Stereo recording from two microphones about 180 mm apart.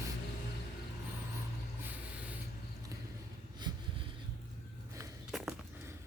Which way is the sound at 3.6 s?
25° right (ahead or behind).